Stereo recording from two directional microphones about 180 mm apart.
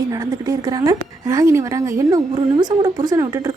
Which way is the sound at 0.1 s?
20° right (ahead or behind).